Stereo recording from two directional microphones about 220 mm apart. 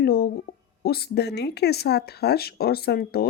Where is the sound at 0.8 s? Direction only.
45° left (ahead or behind).